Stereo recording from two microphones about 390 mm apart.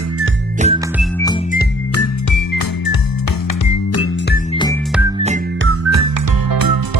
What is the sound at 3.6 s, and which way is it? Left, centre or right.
Music, left.